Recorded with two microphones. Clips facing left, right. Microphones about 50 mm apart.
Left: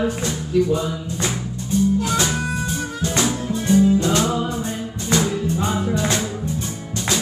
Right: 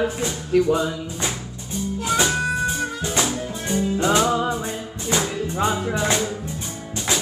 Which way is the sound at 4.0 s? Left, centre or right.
Centre.